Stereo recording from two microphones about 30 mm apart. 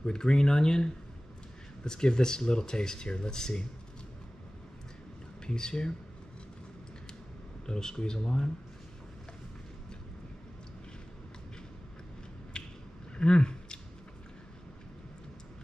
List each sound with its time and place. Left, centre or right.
0.1 s speech: left
5.5 s speech: left
7.6 s speech: left
12.6 s finger snapping: left
13.2 s speech: left